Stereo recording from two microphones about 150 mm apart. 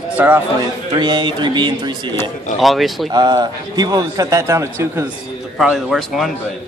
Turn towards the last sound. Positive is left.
turn(degrees=0)  # may be behind; listen again after turning